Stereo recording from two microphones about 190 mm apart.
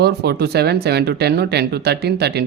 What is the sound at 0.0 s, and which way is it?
Speech, 60° right (ahead or behind).